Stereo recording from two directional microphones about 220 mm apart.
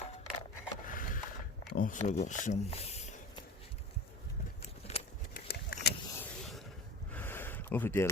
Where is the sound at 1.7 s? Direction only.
40° left (ahead or behind).